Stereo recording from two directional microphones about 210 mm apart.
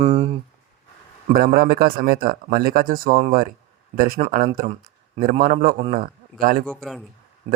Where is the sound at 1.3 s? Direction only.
45° right (ahead or behind).